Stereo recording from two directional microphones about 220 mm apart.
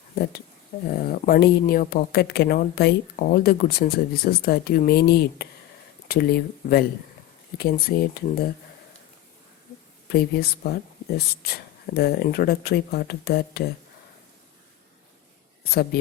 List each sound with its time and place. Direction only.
0.9 s speech: 45° left (ahead or behind)
10.1 s speech: 45° left (ahead or behind)
15.7 s speech: 45° left (ahead or behind)